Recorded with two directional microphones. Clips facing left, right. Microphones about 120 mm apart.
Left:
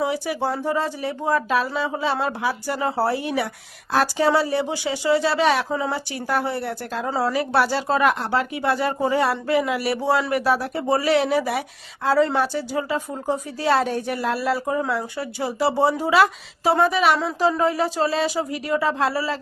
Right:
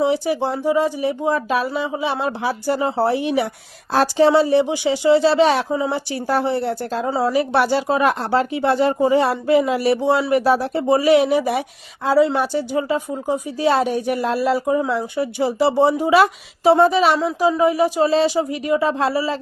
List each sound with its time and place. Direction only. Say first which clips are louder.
0.0 s a woman's voice: right 5 dB; 25° right (ahead or behind)
2.4 s a woman's voice: right 4 dB; 30° right (ahead or behind)
5.6 s speech: right 4 dB; 15° right (ahead or behind)
6.1 s a woman's voice: right 4 dB; 30° right (ahead or behind)
8.3 s a woman's voice: right 4 dB; 30° right (ahead or behind)
17.2 s a woman's voice: right 3 dB; 5° right (ahead or behind)